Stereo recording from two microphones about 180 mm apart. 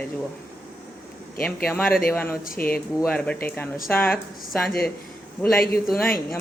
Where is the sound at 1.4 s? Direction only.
10° left (ahead or behind).